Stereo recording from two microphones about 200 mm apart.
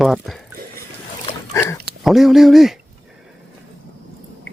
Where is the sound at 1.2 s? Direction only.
15° left (ahead or behind).